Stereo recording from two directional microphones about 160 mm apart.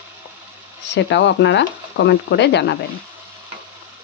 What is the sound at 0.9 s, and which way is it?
Speech, 90° left.